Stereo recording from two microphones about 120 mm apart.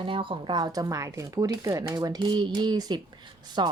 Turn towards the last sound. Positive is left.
turn(degrees=-40)  # may be behind; listen again after turning